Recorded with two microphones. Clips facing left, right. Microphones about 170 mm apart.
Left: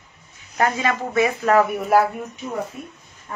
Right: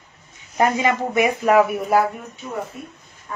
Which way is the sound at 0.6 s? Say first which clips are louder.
Right 2 dB; 20° right (ahead or behind).